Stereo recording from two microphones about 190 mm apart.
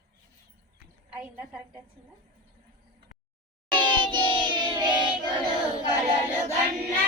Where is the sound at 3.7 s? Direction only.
25° right (ahead or behind).